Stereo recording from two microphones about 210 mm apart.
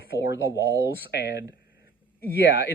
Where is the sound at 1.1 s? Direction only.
55° left (ahead or behind).